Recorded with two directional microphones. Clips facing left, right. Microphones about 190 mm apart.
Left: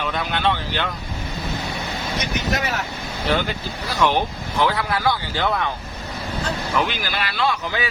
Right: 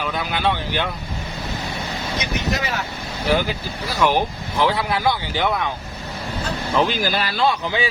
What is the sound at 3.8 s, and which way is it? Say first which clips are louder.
Speech: right 1 dB; 10° right (ahead or behind).